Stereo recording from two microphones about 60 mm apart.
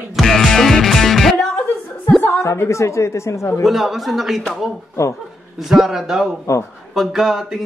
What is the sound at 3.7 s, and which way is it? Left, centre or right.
Speech, centre.